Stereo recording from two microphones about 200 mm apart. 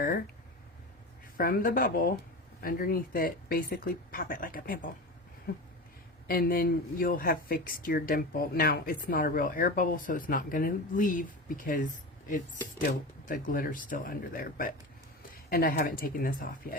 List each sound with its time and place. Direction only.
1.4 s speech: 45° left (ahead or behind)